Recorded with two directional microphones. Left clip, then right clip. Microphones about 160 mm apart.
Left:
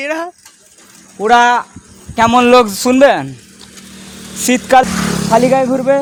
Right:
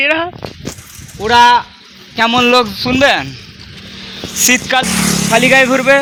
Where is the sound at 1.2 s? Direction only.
90° left.